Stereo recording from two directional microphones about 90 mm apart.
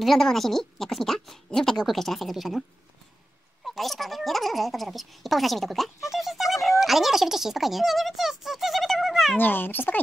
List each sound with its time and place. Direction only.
0.0 s a woman's voice: centre (ahead or behind)
3.6 s a woman's voice: centre (ahead or behind)
6.1 s a sound: centre (ahead or behind)
6.8 s speech: 5° right (ahead or behind)
9.4 s a child's voice: 20° left (ahead or behind)